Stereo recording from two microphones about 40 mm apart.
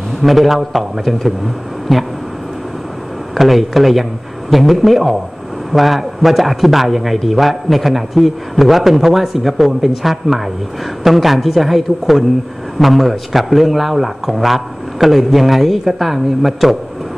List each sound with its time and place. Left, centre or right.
0.2 s speech: centre
3.3 s speech: centre